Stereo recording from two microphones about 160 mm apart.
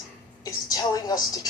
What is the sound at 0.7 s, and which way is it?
Speech, 25° left (ahead or behind).